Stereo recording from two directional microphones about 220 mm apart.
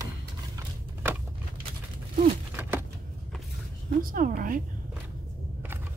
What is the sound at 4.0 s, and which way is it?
Speech, 40° right (ahead or behind).